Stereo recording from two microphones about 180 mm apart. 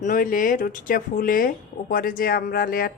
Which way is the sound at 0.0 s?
50° left (ahead or behind).